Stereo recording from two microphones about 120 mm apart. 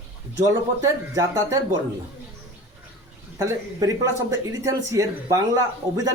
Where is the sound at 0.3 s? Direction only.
30° right (ahead or behind).